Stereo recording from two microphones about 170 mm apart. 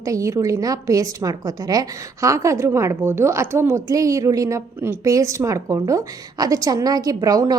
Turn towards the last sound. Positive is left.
turn(degrees=-20)  # may be behind; listen again after turning